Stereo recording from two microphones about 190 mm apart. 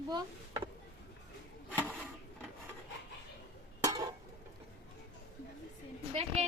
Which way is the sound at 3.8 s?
20° right (ahead or behind).